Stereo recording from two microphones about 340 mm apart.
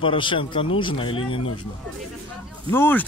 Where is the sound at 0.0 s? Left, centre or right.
Centre.